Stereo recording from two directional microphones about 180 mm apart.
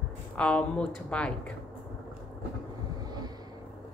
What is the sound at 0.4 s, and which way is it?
Speech, 5° left (ahead or behind).